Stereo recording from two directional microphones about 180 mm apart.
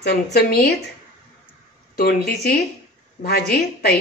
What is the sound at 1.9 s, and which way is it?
Speech, 65° left (ahead or behind).